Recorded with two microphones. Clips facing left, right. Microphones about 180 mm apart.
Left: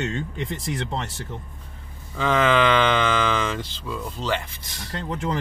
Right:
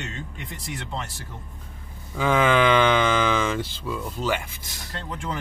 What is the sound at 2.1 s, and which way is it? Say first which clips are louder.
Speech: even; 10° right (ahead or behind).